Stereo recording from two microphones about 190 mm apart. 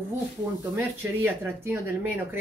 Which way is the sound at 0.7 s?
10° right (ahead or behind).